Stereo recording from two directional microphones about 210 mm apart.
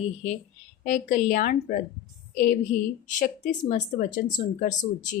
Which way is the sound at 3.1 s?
40° left (ahead or behind).